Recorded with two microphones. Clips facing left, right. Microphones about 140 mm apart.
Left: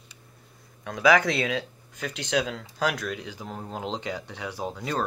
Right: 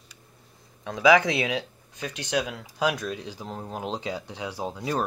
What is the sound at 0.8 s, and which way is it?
Speech, 20° right (ahead or behind).